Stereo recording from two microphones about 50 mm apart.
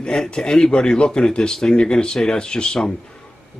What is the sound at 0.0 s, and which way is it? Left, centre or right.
Speech, centre.